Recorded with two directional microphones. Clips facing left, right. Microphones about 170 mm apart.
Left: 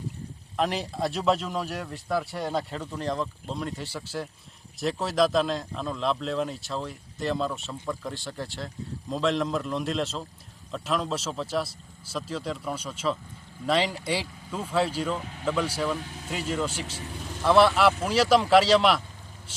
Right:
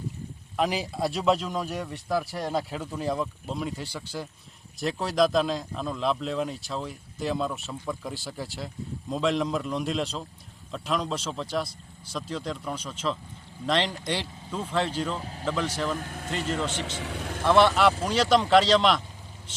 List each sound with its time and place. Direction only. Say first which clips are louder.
0.5 s speech: right 1 dB; centre (ahead or behind)
15.2 s speech: right 1 dB; 35° right (ahead or behind)
15.4 s speech: left 1 dB; 10° left (ahead or behind)
16.0 s speech: right 2 dB; 55° right (ahead or behind)
16.5 s speech: left 1 dB; 10° left (ahead or behind)
16.8 s speech: right 4 dB; 80° right
17.4 s speech: left 1 dB; centre (ahead or behind)